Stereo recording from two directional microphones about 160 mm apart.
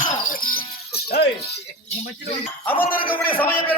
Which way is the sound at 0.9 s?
80° left.